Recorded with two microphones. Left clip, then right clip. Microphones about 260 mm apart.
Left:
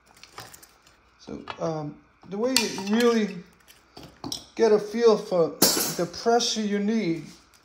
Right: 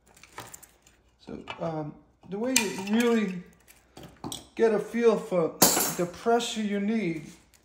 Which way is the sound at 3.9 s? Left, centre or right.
Left.